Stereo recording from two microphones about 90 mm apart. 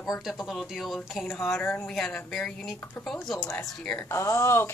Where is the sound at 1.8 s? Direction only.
10° left (ahead or behind).